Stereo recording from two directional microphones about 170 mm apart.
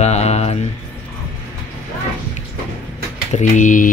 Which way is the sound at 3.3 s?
45° left (ahead or behind).